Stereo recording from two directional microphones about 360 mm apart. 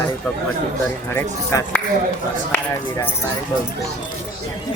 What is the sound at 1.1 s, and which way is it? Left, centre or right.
Speech, centre.